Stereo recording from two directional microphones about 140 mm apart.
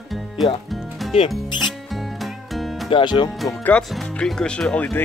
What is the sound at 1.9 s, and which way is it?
Music, centre (ahead or behind).